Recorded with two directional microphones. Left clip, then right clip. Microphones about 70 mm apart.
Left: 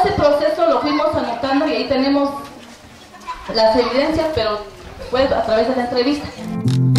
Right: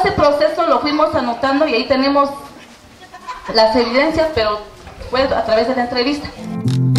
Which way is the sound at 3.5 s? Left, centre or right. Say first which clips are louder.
Right 1 dB; right.